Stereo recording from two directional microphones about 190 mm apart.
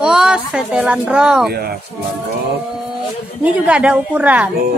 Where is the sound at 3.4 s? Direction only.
5° right (ahead or behind).